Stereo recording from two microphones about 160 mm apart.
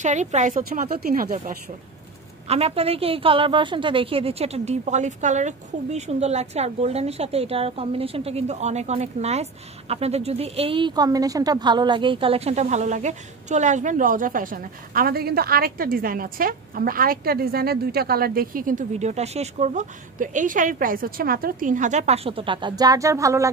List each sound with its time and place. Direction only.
0.0 s a woman's voice: 50° right (ahead or behind)
2.4 s a woman's voice: 40° right (ahead or behind); by 23.5 s 20° right (ahead or behind)